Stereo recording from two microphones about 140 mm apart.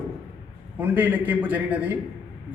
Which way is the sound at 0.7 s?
10° right (ahead or behind).